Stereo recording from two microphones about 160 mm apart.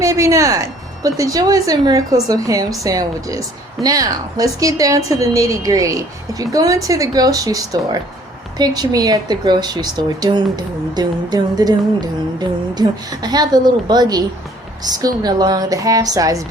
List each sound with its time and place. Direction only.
0.0 s speech: 20° right (ahead or behind)